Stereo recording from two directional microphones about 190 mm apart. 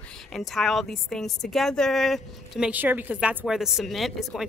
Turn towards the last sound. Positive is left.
turn(degrees=0)  # may be behind; listen again after turning